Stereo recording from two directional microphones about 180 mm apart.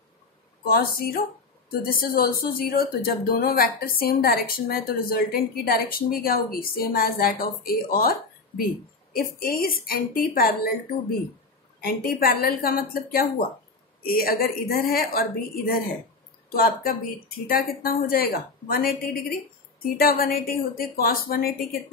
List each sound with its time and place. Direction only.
0.7 s speech: 55° left (ahead or behind)
11.8 s speech: 55° left (ahead or behind)